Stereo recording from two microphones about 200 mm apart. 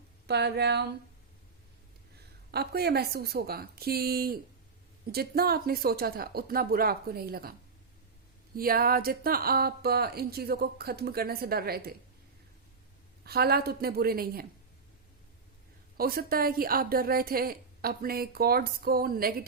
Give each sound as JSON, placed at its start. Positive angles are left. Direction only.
{"t": 0.3, "sound": "speech", "side_deg": -55}
{"t": 2.5, "sound": "speech", "side_deg": -55}
{"t": 8.5, "sound": "speech", "side_deg": -45}
{"t": 13.2, "sound": "speech", "side_deg": -50}
{"t": 16.0, "sound": "speech", "side_deg": -45}